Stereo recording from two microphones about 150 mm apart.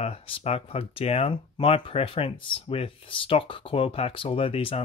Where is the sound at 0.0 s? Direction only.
45° left (ahead or behind).